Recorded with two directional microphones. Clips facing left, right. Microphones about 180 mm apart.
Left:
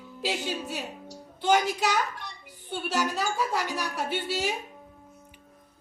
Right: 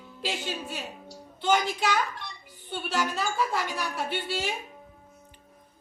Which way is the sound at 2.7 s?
10° left (ahead or behind).